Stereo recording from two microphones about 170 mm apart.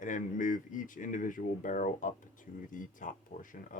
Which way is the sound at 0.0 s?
50° left (ahead or behind).